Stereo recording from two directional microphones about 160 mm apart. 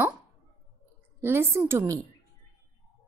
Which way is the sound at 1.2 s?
15° right (ahead or behind).